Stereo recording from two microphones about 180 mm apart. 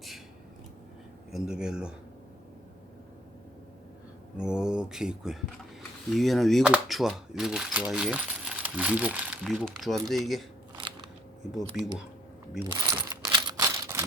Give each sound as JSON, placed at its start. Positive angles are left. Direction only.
{"t": 1.3, "sound": "speech", "side_deg": -5}
{"t": 4.4, "sound": "speech", "side_deg": -5}
{"t": 12.6, "sound": "a sound", "side_deg": -20}